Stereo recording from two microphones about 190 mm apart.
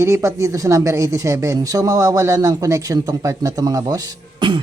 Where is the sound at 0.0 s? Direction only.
15° right (ahead or behind).